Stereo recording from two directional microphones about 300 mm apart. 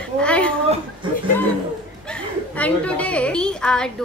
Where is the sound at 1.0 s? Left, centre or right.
Centre.